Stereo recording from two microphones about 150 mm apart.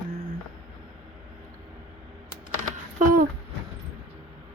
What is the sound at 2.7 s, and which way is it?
Typing, 60° right (ahead or behind).